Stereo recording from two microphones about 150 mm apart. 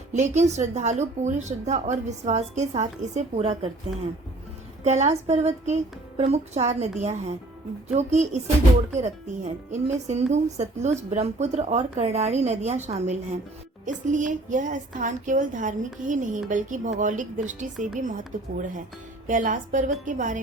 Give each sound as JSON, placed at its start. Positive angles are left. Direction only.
{"t": 0.1, "sound": "a woman's voice", "side_deg": -50}